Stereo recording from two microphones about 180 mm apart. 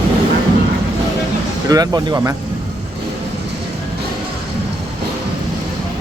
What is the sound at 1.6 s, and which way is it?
Speech, 20° right (ahead or behind).